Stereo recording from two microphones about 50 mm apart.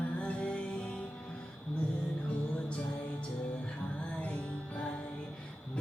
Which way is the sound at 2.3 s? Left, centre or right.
Left.